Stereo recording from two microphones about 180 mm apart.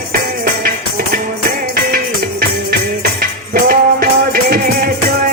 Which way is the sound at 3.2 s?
55° right (ahead or behind).